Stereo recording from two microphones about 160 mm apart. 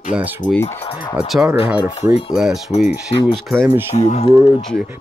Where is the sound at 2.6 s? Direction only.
45° left (ahead or behind).